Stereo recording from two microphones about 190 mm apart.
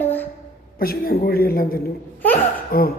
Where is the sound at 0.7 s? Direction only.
50° left (ahead or behind).